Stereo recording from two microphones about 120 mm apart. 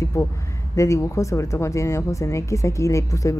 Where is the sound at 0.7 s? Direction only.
25° left (ahead or behind).